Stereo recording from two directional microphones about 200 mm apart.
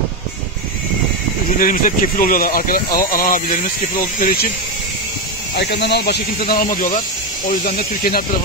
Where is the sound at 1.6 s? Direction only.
45° left (ahead or behind).